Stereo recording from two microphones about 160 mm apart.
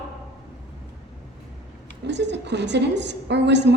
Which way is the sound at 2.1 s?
90° right.